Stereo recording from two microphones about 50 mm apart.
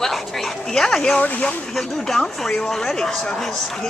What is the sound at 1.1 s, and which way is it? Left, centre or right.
Speech, left.